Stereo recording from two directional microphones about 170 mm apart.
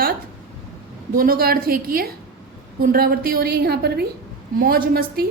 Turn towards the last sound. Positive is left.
turn(degrees=-65)  # may be behind; listen again after turning